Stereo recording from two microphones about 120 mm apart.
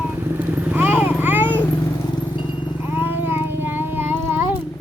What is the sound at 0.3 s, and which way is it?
Vehicle, 15° right (ahead or behind).